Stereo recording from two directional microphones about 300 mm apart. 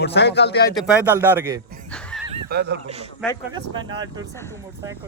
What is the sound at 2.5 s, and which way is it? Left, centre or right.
Speech, right.